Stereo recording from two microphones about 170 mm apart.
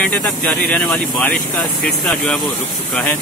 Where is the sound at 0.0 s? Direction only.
5° left (ahead or behind).